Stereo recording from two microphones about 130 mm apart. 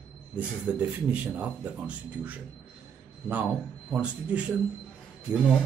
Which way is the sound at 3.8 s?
10° right (ahead or behind).